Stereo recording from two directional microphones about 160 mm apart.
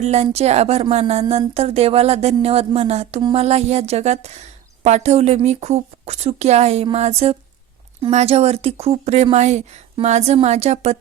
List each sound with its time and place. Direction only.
0.0 s a woman's voice: 45° right (ahead or behind)